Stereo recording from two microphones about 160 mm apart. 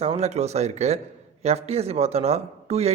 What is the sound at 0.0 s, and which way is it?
A man's voice, 40° right (ahead or behind).